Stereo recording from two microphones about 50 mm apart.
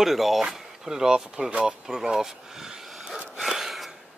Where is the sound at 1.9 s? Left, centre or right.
Centre.